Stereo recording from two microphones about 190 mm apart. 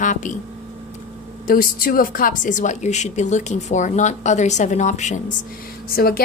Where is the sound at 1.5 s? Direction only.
50° left (ahead or behind).